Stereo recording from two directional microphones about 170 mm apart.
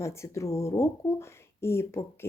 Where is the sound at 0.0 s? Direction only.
15° left (ahead or behind).